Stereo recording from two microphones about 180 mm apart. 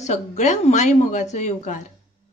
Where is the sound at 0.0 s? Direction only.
40° left (ahead or behind).